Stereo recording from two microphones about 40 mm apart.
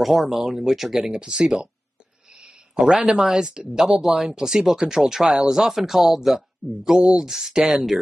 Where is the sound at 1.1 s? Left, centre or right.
Right.